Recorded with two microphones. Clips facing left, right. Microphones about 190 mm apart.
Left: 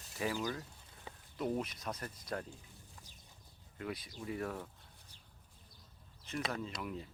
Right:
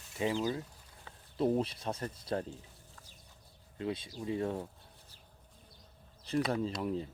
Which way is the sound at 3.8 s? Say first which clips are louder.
Right 6 dB; 25° right (ahead or behind).